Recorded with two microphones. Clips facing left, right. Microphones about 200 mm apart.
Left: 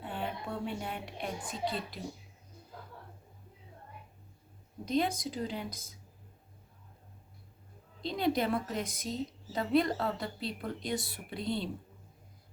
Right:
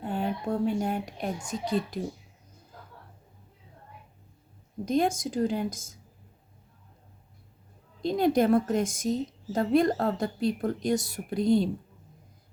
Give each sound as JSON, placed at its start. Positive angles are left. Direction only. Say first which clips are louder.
{"t": 0.0, "sound": "a sound", "louder": "right 8 dB", "side_deg": -45}
{"t": 1.5, "sound": "a woman's voice", "louder": "right 9 dB", "side_deg": -45}
{"t": 4.9, "sound": "a woman's voice", "louder": "right 5 dB", "side_deg": -45}
{"t": 8.0, "sound": "a woman's voice", "louder": "right 7 dB", "side_deg": -45}